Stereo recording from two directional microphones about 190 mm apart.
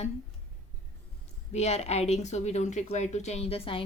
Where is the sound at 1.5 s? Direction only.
35° left (ahead or behind).